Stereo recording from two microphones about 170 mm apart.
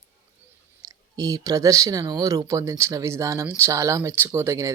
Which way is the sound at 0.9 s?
20° right (ahead or behind).